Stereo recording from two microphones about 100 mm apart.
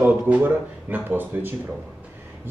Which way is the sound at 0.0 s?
20° right (ahead or behind).